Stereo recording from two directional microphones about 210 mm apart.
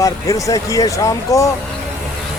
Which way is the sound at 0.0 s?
15° left (ahead or behind).